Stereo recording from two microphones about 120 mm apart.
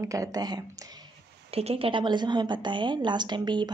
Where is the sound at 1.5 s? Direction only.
55° right (ahead or behind).